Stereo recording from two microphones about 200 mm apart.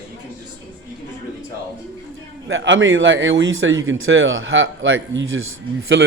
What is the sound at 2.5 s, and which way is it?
Speech, 65° right (ahead or behind).